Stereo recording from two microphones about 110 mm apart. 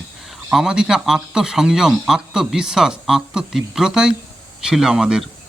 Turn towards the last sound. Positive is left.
turn(degrees=-5)  # may be behind; listen again after turning